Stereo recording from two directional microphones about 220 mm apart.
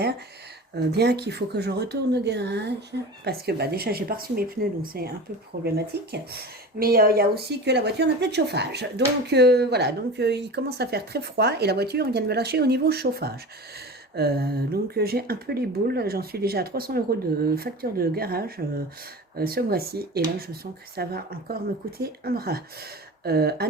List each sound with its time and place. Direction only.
0.8 s speech: 50° right (ahead or behind)